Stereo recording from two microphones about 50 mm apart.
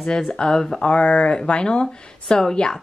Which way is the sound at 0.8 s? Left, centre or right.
Left.